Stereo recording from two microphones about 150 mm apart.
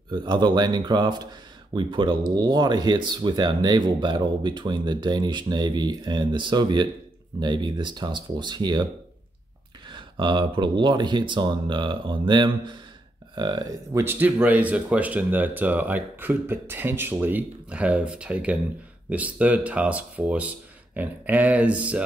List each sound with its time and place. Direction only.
0.1 s speech: 30° right (ahead or behind)
9.8 s speech: 30° right (ahead or behind); by 22.0 s 10° right (ahead or behind)